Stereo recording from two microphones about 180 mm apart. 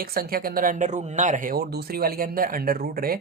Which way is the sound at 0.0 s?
55° right (ahead or behind).